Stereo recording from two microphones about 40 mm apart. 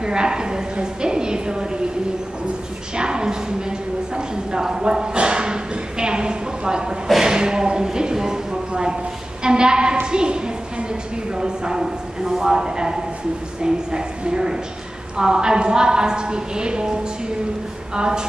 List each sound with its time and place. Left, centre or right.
0.0 s a woman's voice: centre
3.0 s a sound: right
13.6 s a woman's voice: right
17.9 s a woman's voice: right